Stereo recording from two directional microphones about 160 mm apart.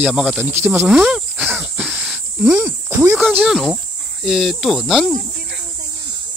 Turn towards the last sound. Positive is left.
turn(degrees=0)  # may be behind; listen again after turning